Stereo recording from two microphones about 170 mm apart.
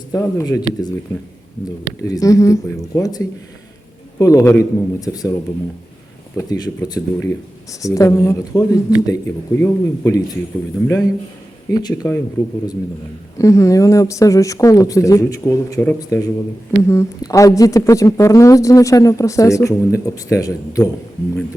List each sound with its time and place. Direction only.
0.1 s speech: 15° left (ahead or behind)
2.0 s speech: 20° left (ahead or behind)